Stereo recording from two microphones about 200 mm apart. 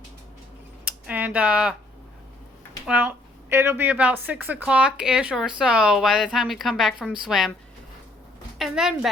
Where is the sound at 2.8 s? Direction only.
10° right (ahead or behind).